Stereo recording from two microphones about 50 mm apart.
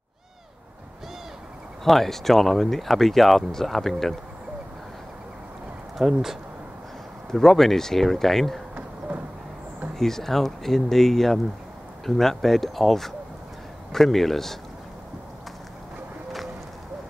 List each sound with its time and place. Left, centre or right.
1.9 s speech: centre
5.9 s speech: centre
7.2 s speech: centre
8.7 s a sound: right
9.9 s speech: centre